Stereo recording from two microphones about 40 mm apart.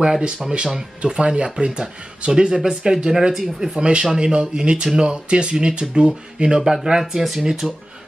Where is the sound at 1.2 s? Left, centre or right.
Right; by 7.7 s centre.